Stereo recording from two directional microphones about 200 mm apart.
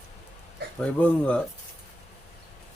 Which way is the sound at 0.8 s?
5° left (ahead or behind).